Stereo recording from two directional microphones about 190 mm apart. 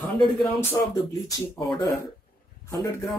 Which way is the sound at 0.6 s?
15° left (ahead or behind).